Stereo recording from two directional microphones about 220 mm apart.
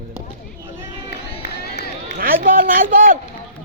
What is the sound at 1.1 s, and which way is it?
Run, 45° left (ahead or behind).